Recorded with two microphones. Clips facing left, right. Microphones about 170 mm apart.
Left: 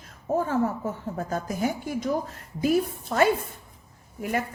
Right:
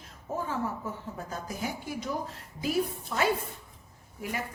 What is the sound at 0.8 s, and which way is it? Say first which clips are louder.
A woman's voice: left 7 dB; 50° left (ahead or behind).